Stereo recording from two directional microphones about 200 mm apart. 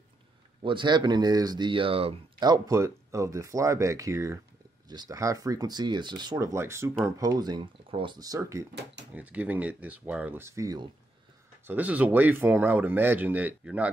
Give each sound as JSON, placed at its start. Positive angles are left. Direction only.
{"t": 0.6, "sound": "speech", "side_deg": -25}